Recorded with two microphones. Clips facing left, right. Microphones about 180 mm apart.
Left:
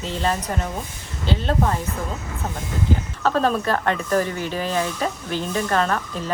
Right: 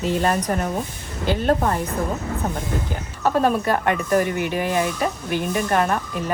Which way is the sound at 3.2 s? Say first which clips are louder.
Right 1 dB; 15° right (ahead or behind).